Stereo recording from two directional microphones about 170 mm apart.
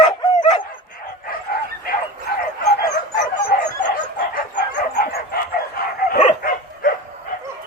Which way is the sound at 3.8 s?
50° left (ahead or behind).